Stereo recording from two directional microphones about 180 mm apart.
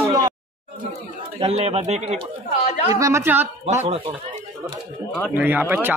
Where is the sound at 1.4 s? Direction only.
35° right (ahead or behind).